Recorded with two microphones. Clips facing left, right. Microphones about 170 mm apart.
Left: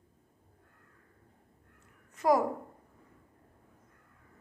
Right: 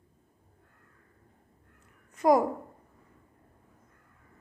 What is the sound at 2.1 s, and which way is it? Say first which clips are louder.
Speech: right 4 dB; 15° right (ahead or behind).